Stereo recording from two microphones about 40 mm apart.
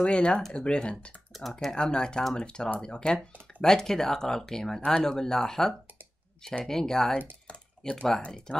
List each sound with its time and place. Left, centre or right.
0.0 s speech: left
1.3 s speech: centre
1.8 s speech: left
7.4 s computer keyboard: left
8.5 s speech: left